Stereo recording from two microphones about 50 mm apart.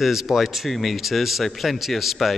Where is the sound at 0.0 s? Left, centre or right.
Centre.